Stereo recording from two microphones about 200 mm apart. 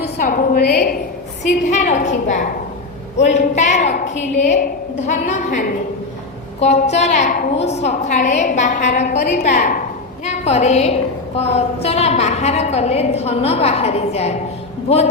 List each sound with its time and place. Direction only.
0.2 s a woman's voice: 45° left (ahead or behind)
1.7 s a woman's voice: 35° left (ahead or behind)